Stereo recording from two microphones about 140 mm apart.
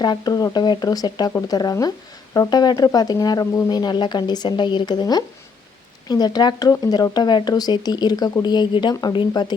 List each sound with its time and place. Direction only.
0.0 s speech: 30° left (ahead or behind)